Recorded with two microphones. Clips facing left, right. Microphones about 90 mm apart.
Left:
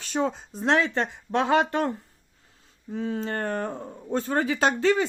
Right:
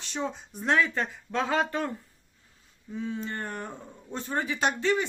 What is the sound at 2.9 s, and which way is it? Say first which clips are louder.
Speech: left 4 dB; 40° left (ahead or behind).